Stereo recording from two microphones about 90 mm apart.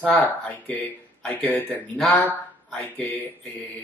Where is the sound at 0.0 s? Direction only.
20° left (ahead or behind).